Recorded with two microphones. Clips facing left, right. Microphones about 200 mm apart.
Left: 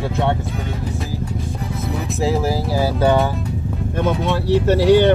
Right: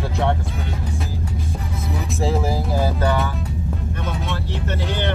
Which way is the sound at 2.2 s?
5° left (ahead or behind).